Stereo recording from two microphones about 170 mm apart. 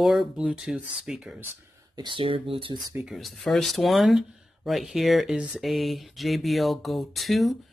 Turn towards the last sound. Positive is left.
turn(degrees=0)  # may be behind; listen again after turning